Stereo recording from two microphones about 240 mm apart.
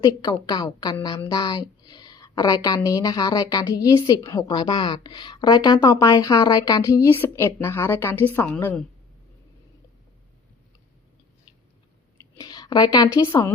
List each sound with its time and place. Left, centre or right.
0.0 s a woman's voice: centre
12.4 s a sound: centre
13.1 s a woman's voice: centre